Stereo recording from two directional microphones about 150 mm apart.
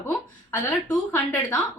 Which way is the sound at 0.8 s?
20° left (ahead or behind).